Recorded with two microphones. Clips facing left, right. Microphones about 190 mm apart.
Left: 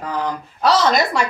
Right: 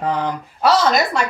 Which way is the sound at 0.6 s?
5° right (ahead or behind).